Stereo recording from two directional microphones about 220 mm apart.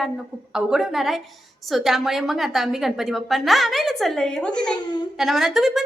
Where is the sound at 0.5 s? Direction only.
Centre (ahead or behind).